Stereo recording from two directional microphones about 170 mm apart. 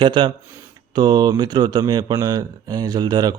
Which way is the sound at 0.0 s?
30° right (ahead or behind).